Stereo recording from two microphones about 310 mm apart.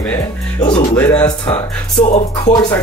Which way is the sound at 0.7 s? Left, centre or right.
Centre.